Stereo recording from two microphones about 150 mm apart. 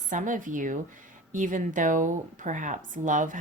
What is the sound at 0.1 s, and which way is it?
A woman's voice, 60° right (ahead or behind).